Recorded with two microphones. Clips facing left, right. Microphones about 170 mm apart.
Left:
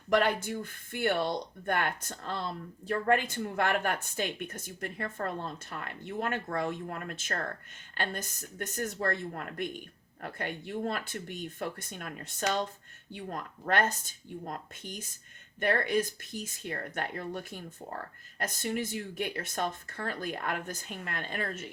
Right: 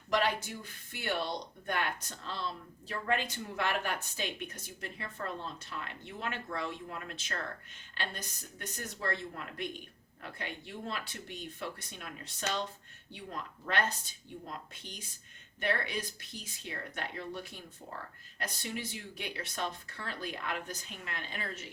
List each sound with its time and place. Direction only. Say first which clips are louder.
0.1 s speech: left 5 dB; 55° left (ahead or behind)